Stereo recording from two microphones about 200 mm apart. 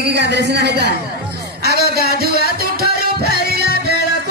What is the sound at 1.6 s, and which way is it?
Music, 50° right (ahead or behind).